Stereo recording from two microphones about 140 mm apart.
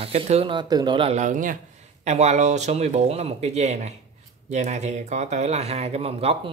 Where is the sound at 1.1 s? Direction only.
65° right (ahead or behind).